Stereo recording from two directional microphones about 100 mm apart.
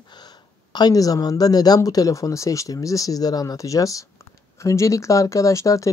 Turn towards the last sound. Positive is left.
turn(degrees=35)  # may be behind; listen again after turning